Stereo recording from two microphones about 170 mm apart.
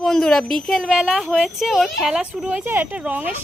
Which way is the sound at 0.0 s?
Centre (ahead or behind).